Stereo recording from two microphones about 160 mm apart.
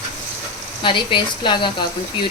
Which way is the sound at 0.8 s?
30° left (ahead or behind).